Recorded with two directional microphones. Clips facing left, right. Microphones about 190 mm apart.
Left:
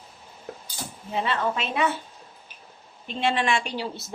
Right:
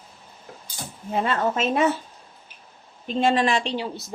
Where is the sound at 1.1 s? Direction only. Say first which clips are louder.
Right 3 dB; 50° right (ahead or behind).